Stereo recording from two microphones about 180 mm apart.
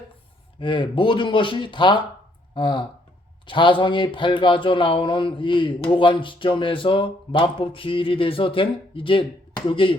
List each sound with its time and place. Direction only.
0.6 s speech: 25° left (ahead or behind)